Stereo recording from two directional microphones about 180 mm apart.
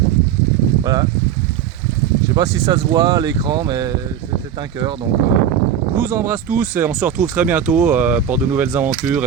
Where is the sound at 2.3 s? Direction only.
20° right (ahead or behind).